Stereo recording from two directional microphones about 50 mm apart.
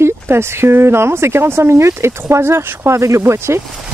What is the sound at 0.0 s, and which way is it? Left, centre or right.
Speech, right.